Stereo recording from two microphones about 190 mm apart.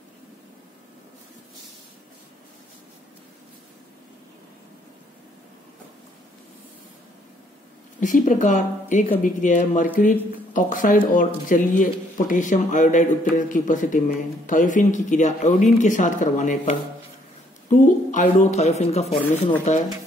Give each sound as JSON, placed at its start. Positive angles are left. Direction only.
{"t": 8.0, "sound": "a woman's voice", "side_deg": 40}